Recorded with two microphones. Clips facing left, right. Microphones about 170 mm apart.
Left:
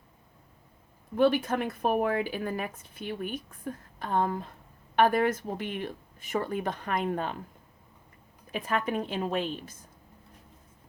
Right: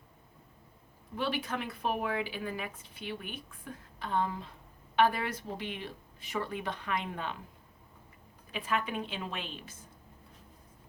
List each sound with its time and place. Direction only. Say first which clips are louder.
1.1 s speech: left 10 dB; 45° left (ahead or behind)
8.5 s speech: left 4 dB; 45° left (ahead or behind)